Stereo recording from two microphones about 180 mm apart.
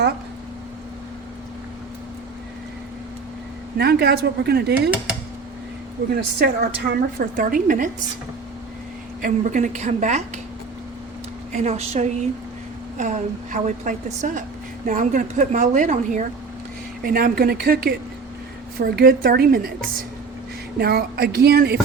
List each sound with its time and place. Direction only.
3.8 s a woman's voice: 65° right (ahead or behind)
6.1 s a woman's voice: 65° right (ahead or behind); by 7.9 s 50° right (ahead or behind)
9.2 s a woman's voice: 45° right (ahead or behind)
11.5 s a woman's voice: 35° right (ahead or behind); by 19.7 s 55° right (ahead or behind)
20.7 s a woman's voice: 60° right (ahead or behind)